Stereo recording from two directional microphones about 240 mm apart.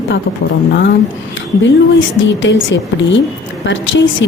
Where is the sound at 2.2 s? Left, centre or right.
Left.